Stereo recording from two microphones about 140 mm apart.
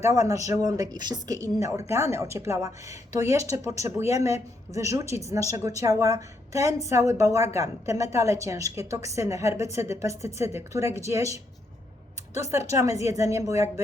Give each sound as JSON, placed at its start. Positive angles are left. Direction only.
{"t": 0.0, "sound": "speech", "side_deg": -20}